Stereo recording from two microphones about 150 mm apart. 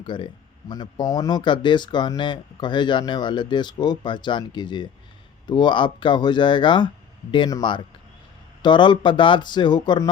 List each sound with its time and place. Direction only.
0.0 s speech: 30° left (ahead or behind)